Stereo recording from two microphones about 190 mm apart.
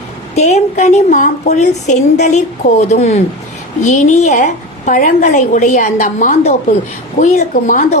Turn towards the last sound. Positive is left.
turn(degrees=40)  # may be behind; listen again after turning